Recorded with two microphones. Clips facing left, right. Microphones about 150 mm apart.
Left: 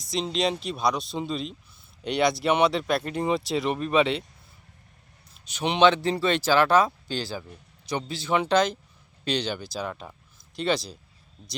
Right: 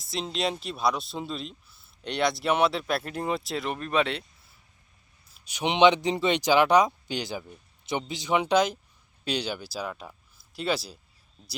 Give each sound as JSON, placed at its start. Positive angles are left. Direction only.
{"t": 0.0, "sound": "speech", "side_deg": -5}
{"t": 5.3, "sound": "a man's voice", "side_deg": -10}